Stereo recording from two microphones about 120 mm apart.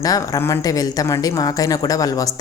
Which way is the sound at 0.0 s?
30° left (ahead or behind).